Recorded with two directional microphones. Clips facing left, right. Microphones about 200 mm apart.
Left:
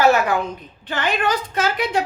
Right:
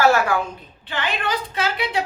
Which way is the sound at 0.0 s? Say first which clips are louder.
Left 1 dB; 20° left (ahead or behind).